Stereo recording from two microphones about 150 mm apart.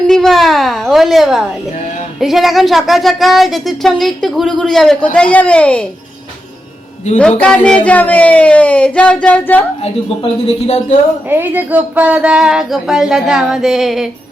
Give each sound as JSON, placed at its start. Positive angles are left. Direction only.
{"t": 0.1, "sound": "a child's voice", "side_deg": 0}
{"t": 7.2, "sound": "speech", "side_deg": 5}
{"t": 9.8, "sound": "speech", "side_deg": 40}
{"t": 11.3, "sound": "speech", "side_deg": -15}